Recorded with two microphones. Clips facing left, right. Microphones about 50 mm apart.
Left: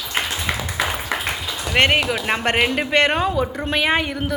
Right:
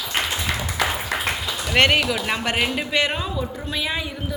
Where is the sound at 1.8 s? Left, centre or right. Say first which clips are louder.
Left 1 dB; left.